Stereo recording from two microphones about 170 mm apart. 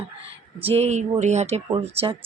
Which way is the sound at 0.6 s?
35° right (ahead or behind).